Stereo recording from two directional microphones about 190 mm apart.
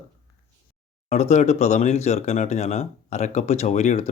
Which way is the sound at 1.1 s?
35° left (ahead or behind).